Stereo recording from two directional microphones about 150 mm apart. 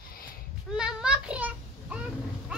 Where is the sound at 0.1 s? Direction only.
75° left (ahead or behind).